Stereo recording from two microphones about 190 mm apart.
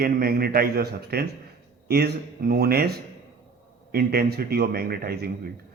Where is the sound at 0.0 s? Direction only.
55° right (ahead or behind).